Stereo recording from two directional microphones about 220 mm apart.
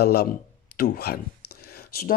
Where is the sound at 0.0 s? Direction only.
45° left (ahead or behind).